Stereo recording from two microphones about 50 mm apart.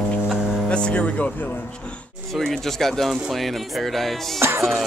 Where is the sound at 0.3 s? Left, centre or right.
Centre.